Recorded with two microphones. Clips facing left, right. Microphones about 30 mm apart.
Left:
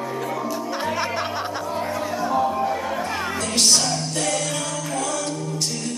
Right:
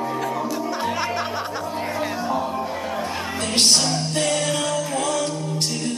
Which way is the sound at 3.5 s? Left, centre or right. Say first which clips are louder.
Right 2 dB; right.